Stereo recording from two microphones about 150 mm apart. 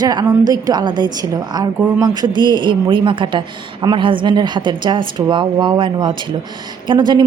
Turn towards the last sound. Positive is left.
turn(degrees=-30)  # may be behind; listen again after turning